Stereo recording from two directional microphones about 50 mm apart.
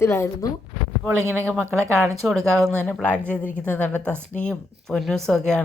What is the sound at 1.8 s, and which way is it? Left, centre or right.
Speech, right.